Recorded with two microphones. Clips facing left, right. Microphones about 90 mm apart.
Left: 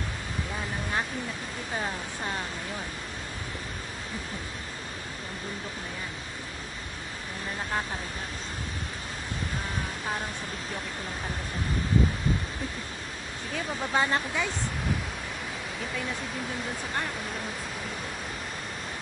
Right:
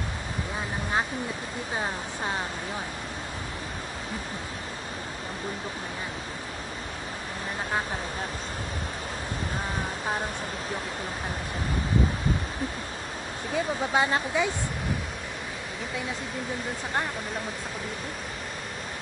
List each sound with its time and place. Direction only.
13.9 s speech: 15° right (ahead or behind)